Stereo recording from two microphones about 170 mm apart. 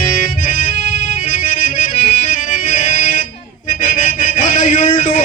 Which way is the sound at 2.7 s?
50° left (ahead or behind).